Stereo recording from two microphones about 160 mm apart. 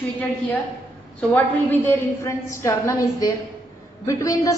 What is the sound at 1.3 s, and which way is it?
A woman's voice, 15° left (ahead or behind).